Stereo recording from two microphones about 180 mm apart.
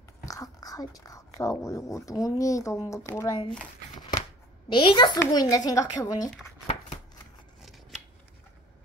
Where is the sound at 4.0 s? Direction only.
25° left (ahead or behind).